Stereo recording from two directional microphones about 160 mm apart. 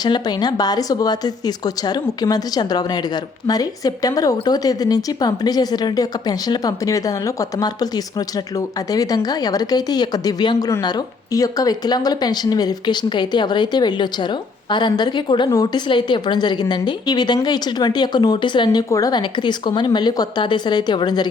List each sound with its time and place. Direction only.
0.0 s speech: 25° left (ahead or behind)